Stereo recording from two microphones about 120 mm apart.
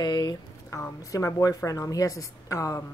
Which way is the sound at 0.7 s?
25° left (ahead or behind).